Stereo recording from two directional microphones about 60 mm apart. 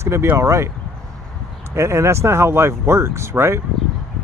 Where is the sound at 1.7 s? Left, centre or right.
Right.